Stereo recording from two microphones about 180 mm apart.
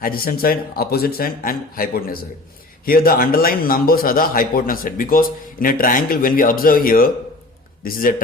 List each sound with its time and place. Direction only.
0.0 s a man's voice: 55° left (ahead or behind)